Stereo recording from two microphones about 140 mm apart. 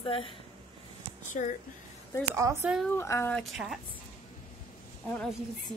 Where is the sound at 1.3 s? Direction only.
60° left (ahead or behind).